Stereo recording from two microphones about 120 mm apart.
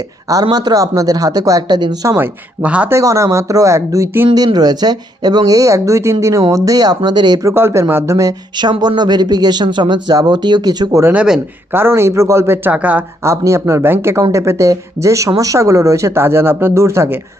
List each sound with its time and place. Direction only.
0.5 s speech: 30° right (ahead or behind)
2.1 s speech: 15° right (ahead or behind)
2.9 s speech: 25° right (ahead or behind)
4.4 s speech: 35° right (ahead or behind)
7.5 s speech: 20° right (ahead or behind)
11.0 s speech: 10° right (ahead or behind)
13.2 s speech: 25° right (ahead or behind)